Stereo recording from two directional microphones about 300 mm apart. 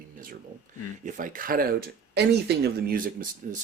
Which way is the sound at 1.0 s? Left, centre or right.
Right.